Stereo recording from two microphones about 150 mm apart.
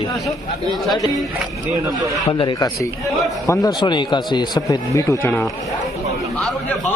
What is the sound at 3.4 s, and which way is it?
Speech, 20° left (ahead or behind).